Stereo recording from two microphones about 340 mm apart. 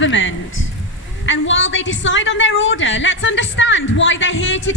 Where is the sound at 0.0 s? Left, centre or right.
Left.